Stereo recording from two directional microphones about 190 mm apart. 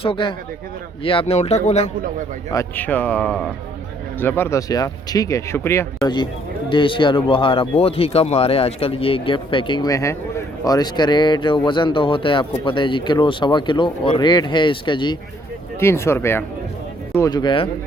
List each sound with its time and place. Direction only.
0.0 s speech: 25° left (ahead or behind)
2.5 s speech: 15° left (ahead or behind)
6.7 s speech: 25° left (ahead or behind)
15.8 s speech: 15° left (ahead or behind)